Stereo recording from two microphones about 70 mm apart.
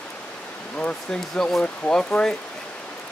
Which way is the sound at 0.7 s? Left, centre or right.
Centre.